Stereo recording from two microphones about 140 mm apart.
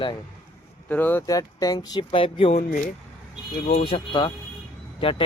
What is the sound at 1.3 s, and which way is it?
Speech, 25° left (ahead or behind).